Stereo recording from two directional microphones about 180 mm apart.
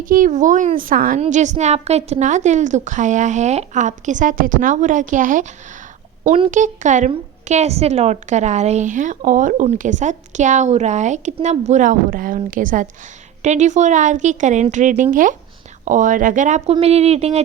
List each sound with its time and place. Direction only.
0.0 s a woman's voice: 50° right (ahead or behind)
6.2 s a child's voice: 30° right (ahead or behind)
6.5 s a woman's voice: 45° right (ahead or behind)